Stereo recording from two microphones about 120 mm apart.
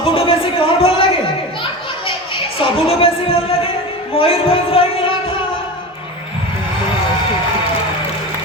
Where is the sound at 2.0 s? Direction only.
50° left (ahead or behind).